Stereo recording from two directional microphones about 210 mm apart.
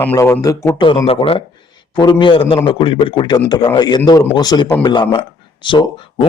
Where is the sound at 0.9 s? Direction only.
25° left (ahead or behind).